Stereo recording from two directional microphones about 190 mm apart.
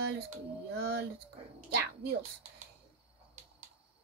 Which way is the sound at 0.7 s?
55° right (ahead or behind).